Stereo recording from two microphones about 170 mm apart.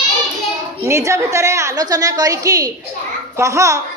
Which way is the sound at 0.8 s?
15° right (ahead or behind).